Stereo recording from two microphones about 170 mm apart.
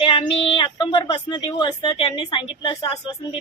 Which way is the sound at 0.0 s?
35° left (ahead or behind).